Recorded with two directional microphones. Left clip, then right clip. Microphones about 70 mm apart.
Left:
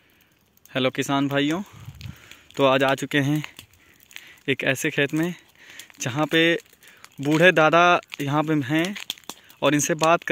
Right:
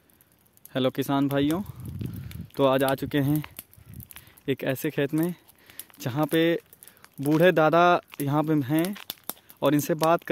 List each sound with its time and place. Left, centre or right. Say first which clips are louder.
0.7 s speech: left 3 dB; centre
2.0 s a sound: right 4 dB; left
2.5 s speech: left 3 dB; centre
4.5 s speech: left 5 dB; centre
7.0 s a sound: left 2 dB; centre
7.4 s speech: left 3 dB; centre